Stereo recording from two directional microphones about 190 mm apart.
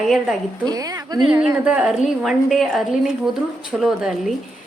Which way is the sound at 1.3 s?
5° right (ahead or behind).